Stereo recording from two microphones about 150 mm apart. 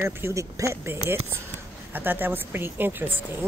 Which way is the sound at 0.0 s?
20° right (ahead or behind).